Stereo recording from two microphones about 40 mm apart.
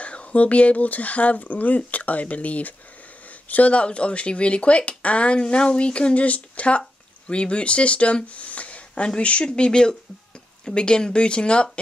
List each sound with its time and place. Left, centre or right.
0.0 s speech: left
6.1 s speech: left